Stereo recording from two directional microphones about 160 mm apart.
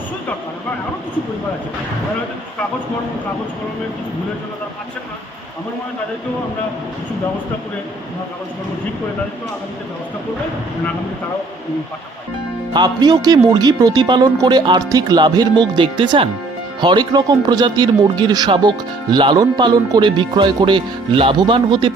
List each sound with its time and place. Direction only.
12.7 s speech: 25° right (ahead or behind)